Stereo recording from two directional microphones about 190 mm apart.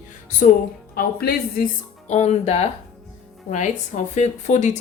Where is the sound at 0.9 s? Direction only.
50° left (ahead or behind).